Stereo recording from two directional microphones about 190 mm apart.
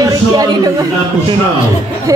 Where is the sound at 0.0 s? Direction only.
20° right (ahead or behind).